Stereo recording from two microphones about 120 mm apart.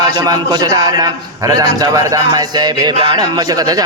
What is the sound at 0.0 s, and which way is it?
A man's voice, 35° right (ahead or behind).